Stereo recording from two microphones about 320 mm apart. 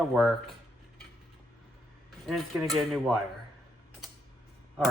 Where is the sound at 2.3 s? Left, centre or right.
Centre.